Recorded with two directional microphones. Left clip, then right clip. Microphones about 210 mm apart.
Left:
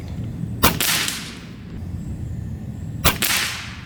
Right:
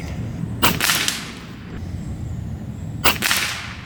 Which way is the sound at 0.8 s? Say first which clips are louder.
Right 2 dB; centre (ahead or behind).